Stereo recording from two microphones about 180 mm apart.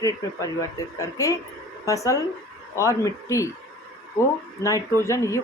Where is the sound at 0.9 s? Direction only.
15° left (ahead or behind).